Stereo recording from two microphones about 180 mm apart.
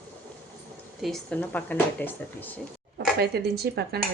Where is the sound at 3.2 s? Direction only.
60° right (ahead or behind).